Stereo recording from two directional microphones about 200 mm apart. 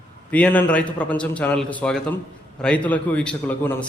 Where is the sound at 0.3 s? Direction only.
5° left (ahead or behind).